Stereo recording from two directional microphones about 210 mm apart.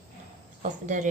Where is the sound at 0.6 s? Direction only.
35° right (ahead or behind).